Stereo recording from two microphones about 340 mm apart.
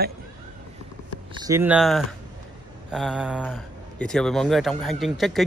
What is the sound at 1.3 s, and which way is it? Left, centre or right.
Speech, centre.